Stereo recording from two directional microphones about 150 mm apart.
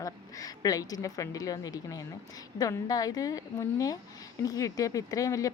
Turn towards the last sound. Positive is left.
turn(degrees=20)  # may be behind; listen again after turning